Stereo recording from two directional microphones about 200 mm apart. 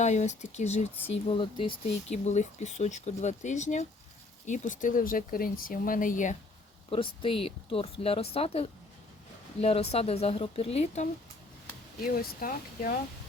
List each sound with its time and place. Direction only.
0.0 s speech: 35° left (ahead or behind)
7.2 s speech: 25° left (ahead or behind)
12.0 s speech: 45° left (ahead or behind)